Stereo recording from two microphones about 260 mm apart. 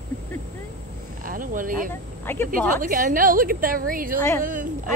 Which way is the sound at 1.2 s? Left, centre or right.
Right.